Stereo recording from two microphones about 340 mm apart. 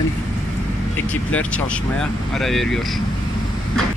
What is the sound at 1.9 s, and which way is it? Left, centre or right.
Speech, centre.